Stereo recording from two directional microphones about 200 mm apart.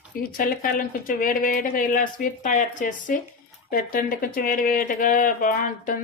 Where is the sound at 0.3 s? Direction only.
45° left (ahead or behind).